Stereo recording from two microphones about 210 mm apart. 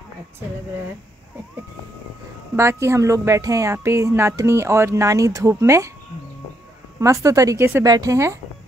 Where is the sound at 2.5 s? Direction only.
15° right (ahead or behind).